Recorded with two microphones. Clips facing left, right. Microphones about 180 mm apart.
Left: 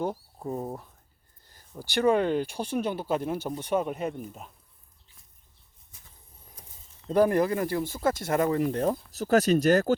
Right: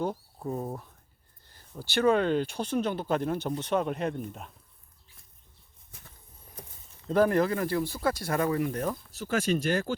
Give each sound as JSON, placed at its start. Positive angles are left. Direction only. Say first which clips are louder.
{"t": 0.0, "sound": "speech", "louder": "left 1 dB", "side_deg": 15}
{"t": 5.9, "sound": "a sound", "louder": "right 4 dB", "side_deg": -65}
{"t": 7.1, "sound": "speech", "louder": "left 1 dB", "side_deg": 15}
{"t": 8.4, "sound": "speech", "louder": "left 3 dB", "side_deg": 30}